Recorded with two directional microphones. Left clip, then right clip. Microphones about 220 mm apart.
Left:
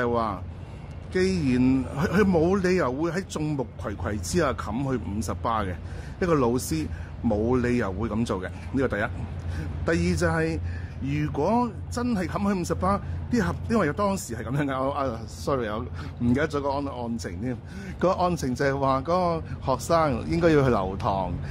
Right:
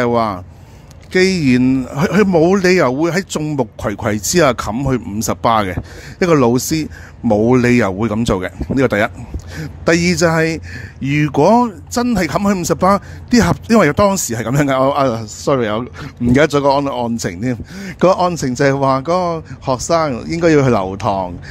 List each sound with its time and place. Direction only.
0.0 s speech: 35° right (ahead or behind)